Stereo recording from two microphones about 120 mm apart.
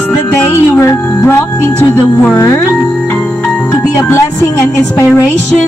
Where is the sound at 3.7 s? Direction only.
25° left (ahead or behind).